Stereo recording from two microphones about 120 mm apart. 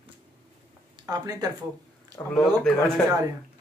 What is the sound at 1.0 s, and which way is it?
Speech, 30° right (ahead or behind).